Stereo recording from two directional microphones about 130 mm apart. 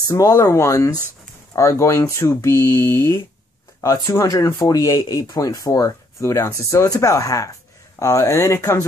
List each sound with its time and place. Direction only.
0.1 s speech: 25° left (ahead or behind)